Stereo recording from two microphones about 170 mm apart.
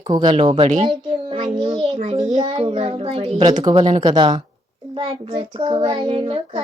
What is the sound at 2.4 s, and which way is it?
A child's voice, 30° right (ahead or behind).